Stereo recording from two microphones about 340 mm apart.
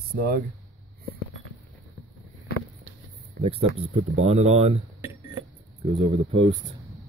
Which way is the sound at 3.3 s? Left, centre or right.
Centre.